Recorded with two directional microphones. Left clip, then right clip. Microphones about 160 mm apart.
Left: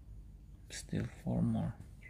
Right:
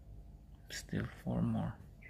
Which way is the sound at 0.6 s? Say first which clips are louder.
Even; 20° left (ahead or behind).